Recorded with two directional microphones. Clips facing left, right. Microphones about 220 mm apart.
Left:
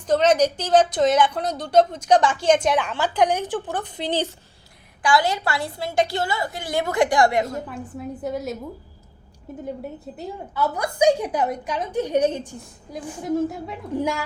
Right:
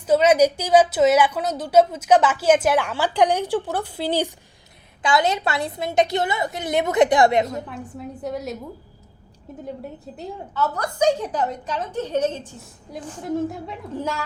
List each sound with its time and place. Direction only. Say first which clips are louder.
0.0 s speech: right 2 dB; 10° right (ahead or behind)
5.0 s a woman's voice: even; 20° right (ahead or behind)
7.7 s a woman's voice: left 2 dB; centre (ahead or behind)
10.2 s a woman's voice: even; 5° left (ahead or behind)
12.5 s a woman's voice: left 1 dB; 5° right (ahead or behind)
13.9 s a woman's voice: left 4 dB; 15° left (ahead or behind)